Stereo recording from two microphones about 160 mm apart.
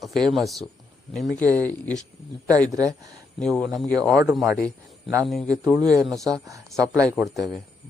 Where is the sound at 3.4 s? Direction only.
5° left (ahead or behind).